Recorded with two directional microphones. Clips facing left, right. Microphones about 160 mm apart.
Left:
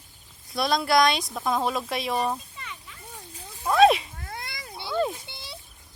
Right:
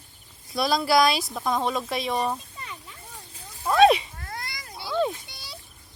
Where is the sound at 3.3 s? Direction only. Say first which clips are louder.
Even; 10° left (ahead or behind).